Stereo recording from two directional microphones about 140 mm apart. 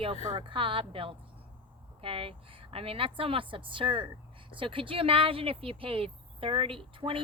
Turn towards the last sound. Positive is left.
turn(degrees=-40)  # may be behind; listen again after turning